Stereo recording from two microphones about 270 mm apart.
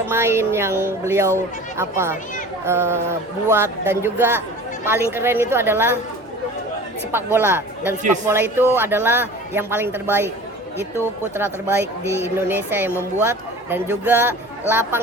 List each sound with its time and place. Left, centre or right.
0.1 s a man's voice: centre
7.1 s a man's voice: centre
8.0 s speech: right
8.3 s a man's voice: centre
11.3 s a man's voice: centre